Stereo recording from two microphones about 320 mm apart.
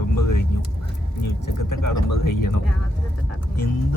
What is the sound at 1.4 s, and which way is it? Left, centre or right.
Speech, left.